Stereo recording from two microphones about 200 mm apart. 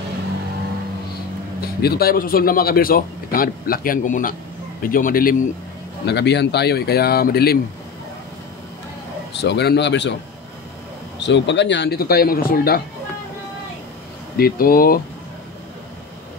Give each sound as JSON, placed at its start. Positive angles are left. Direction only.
{"t": 1.8, "sound": "speech", "side_deg": 50}
{"t": 6.0, "sound": "speech", "side_deg": 60}
{"t": 9.4, "sound": "speech", "side_deg": 55}
{"t": 11.1, "sound": "speech", "side_deg": 60}
{"t": 14.3, "sound": "speech", "side_deg": 50}